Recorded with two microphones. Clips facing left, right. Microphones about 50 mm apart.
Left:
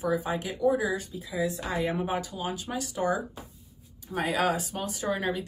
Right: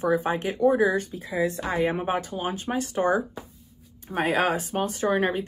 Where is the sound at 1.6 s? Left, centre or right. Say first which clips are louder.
Right 4 dB; right.